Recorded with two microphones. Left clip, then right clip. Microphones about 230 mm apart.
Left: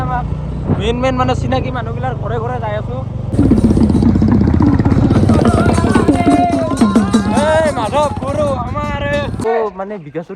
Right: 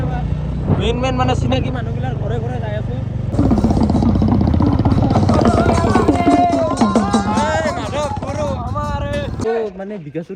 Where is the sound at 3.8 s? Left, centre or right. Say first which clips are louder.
Left 3 dB; right.